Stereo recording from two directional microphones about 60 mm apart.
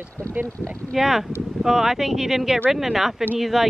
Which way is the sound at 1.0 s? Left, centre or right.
Centre.